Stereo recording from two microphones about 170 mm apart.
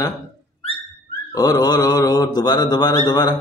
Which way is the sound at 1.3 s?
25° left (ahead or behind).